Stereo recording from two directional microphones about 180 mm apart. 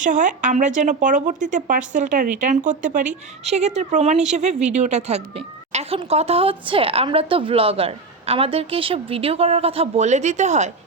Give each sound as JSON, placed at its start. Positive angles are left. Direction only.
{"t": 0.0, "sound": "speech", "side_deg": -45}